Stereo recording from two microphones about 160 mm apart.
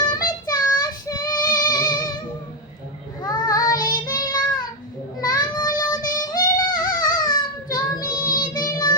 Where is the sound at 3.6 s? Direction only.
60° left (ahead or behind).